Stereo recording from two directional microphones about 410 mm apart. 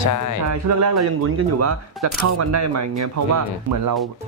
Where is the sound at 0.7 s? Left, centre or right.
Right.